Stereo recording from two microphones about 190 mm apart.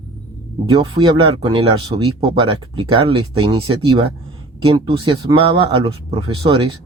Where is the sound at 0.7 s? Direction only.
20° right (ahead or behind).